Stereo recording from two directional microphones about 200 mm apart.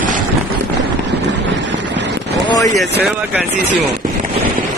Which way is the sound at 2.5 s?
15° left (ahead or behind).